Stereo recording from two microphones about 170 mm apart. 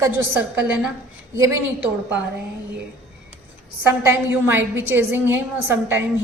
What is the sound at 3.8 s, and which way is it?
A woman's voice, 15° right (ahead or behind).